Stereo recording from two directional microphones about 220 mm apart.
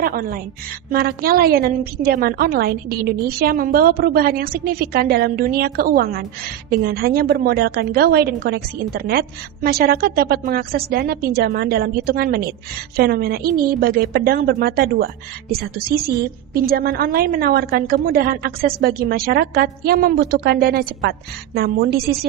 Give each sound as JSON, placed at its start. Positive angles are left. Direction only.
{"t": 0.0, "sound": "a woman's voice", "side_deg": -40}
{"t": 16.6, "sound": "a woman's voice", "side_deg": -45}